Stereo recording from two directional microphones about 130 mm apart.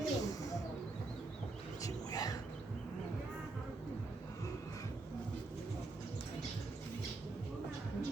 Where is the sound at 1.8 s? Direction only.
30° left (ahead or behind).